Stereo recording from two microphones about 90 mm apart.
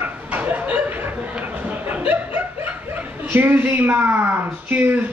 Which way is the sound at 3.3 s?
20° right (ahead or behind).